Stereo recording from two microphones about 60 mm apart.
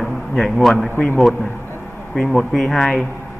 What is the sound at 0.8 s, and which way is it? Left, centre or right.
Speech, left.